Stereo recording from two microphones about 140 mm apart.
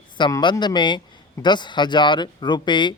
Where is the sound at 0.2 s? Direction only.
30° left (ahead or behind).